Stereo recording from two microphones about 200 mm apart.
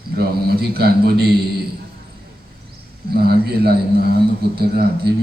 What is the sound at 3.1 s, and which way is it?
A man's voice, 50° right (ahead or behind).